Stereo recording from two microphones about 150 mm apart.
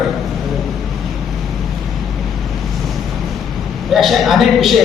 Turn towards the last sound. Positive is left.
turn(degrees=0)  # may be behind; listen again after turning